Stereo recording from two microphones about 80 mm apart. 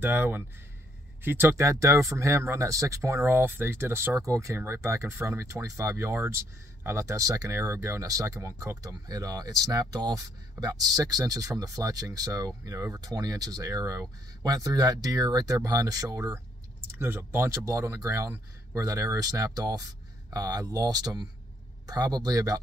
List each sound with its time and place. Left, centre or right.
0.0 s speech: right
4.6 s speech: right
17.0 s speech: right